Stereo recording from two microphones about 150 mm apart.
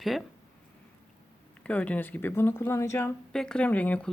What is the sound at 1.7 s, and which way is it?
Speech, 10° left (ahead or behind).